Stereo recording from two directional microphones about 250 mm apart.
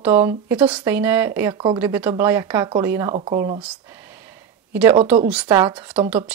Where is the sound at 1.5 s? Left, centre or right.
Centre.